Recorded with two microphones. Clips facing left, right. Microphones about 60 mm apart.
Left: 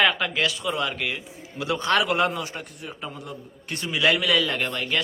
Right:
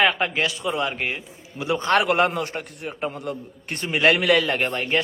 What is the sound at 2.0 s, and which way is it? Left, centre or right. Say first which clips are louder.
A man's voice: right 3 dB; right.